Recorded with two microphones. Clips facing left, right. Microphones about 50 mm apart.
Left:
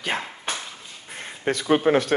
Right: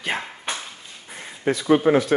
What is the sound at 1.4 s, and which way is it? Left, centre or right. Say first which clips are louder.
Speech: right 2 dB; left.